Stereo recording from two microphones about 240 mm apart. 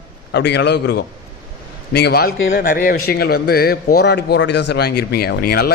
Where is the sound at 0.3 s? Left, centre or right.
Left.